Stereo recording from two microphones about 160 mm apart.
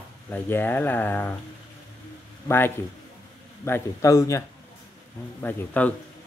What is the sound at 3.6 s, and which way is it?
A man's voice, 20° left (ahead or behind).